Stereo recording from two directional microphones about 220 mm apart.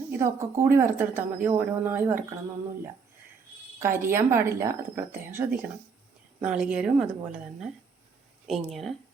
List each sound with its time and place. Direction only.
0.2 s speech: 10° right (ahead or behind)
3.8 s a woman's voice: 10° right (ahead or behind)